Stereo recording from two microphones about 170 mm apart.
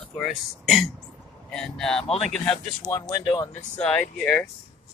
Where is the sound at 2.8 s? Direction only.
15° left (ahead or behind).